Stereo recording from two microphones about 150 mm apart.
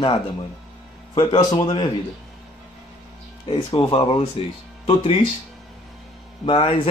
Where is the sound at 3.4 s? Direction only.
35° left (ahead or behind).